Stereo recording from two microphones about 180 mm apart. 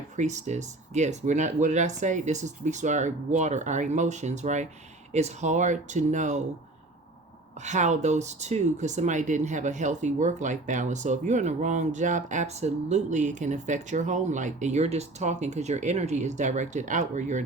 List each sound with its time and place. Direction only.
0.2 s speech: 40° right (ahead or behind)
7.6 s speech: 40° right (ahead or behind)